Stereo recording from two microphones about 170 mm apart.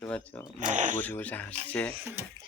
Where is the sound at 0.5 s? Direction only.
45° right (ahead or behind).